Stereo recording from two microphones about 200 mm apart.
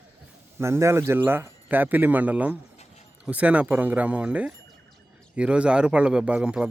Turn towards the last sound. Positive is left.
turn(degrees=-5)  # may be behind; listen again after turning